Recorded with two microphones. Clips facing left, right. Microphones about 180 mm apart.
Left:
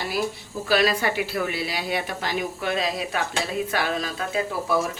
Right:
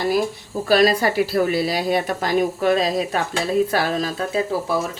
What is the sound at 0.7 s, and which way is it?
A woman's voice, 40° right (ahead or behind).